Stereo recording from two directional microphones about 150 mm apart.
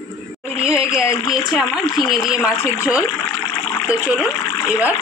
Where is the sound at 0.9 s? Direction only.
20° left (ahead or behind).